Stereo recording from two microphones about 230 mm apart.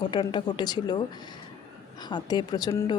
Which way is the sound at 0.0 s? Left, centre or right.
Centre.